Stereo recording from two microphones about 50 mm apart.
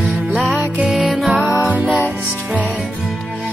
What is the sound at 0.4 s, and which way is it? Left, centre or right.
Music, right.